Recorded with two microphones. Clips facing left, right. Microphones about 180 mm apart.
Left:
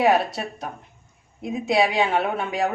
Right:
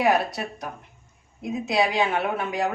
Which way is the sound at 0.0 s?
25° left (ahead or behind).